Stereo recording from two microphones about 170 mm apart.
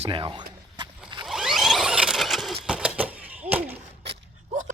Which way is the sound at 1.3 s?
Centre (ahead or behind).